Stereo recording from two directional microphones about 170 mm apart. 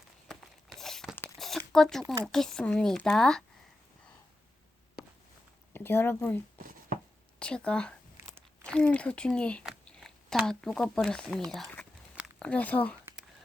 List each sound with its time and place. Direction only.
0.3 s a sound: centre (ahead or behind)
1.1 s tearing: 5° left (ahead or behind)
2.2 s speech: centre (ahead or behind)
5.7 s speech: 15° left (ahead or behind)